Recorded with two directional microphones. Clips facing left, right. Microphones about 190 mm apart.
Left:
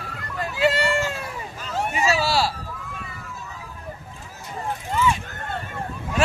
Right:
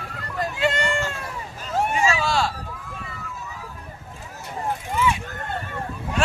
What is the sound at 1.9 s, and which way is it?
Vehicle, 5° left (ahead or behind).